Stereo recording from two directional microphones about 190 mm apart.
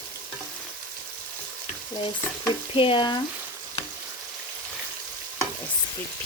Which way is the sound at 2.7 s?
25° left (ahead or behind).